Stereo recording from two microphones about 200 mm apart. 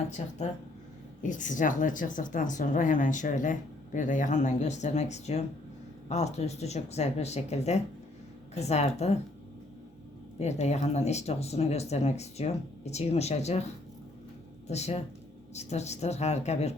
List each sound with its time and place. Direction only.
0.2 s a woman's voice: 35° left (ahead or behind)
10.3 s a woman's voice: 35° left (ahead or behind)
14.7 s a woman's voice: 30° left (ahead or behind)